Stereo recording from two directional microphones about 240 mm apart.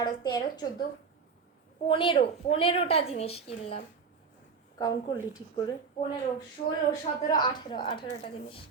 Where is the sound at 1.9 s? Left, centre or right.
Left.